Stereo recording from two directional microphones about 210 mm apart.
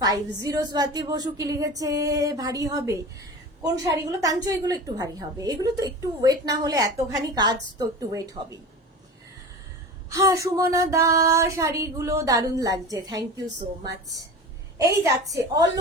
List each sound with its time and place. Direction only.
0.0 s a woman's voice: 15° right (ahead or behind)
10.1 s a woman's voice: 15° right (ahead or behind)
15.3 s a woman's voice: 15° right (ahead or behind)